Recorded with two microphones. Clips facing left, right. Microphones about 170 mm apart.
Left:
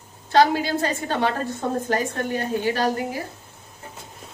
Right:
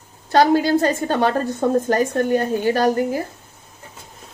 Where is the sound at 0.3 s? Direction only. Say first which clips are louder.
Right 4 dB; 50° right (ahead or behind).